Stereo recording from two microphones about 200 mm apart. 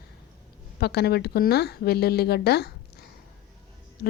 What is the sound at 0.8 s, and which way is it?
Speech, 55° left (ahead or behind).